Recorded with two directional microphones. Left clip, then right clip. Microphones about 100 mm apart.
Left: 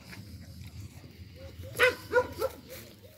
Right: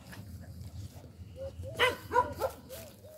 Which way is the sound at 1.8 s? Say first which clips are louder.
Left 3 dB; 60° right (ahead or behind).